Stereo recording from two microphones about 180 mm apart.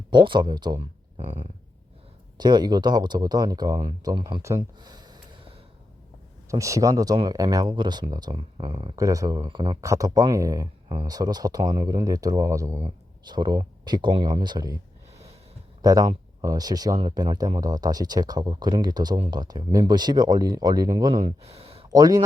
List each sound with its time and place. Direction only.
0.1 s speech: 25° right (ahead or behind)
1.1 s a sound: 35° right (ahead or behind)
2.4 s speech: 25° right (ahead or behind)
6.5 s speech: 15° right (ahead or behind)
15.8 s speech: 20° right (ahead or behind)
21.8 s speech: 20° right (ahead or behind)